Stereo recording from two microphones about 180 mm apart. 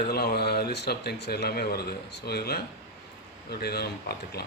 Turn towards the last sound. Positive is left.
turn(degrees=60)  # may be behind; listen again after turning